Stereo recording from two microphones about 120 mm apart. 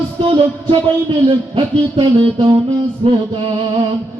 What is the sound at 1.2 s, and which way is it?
Music, 45° right (ahead or behind).